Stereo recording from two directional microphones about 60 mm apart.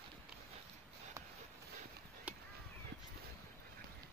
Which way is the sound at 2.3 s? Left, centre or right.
Right.